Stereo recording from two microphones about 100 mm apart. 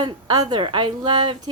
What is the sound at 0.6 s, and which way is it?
Speech, 55° right (ahead or behind).